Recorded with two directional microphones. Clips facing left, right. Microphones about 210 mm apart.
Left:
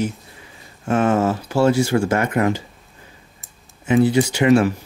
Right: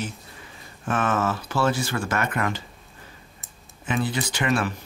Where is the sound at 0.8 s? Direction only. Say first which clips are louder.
Left 7 dB; 25° left (ahead or behind).